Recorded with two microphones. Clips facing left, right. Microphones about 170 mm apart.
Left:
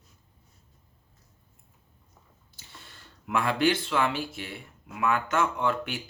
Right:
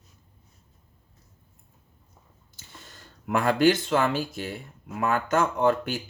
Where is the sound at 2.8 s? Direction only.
45° right (ahead or behind).